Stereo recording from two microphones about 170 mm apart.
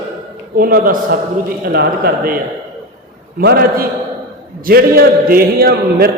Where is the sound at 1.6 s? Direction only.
70° right (ahead or behind).